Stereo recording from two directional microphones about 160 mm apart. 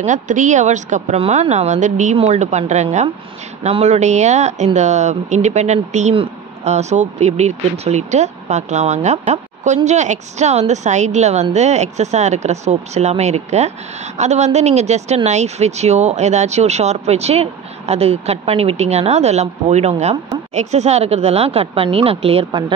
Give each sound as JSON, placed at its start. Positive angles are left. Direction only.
{"t": 0.0, "sound": "speech", "side_deg": -50}